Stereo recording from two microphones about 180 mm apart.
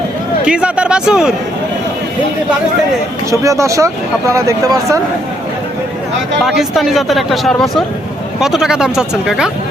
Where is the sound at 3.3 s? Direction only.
15° right (ahead or behind).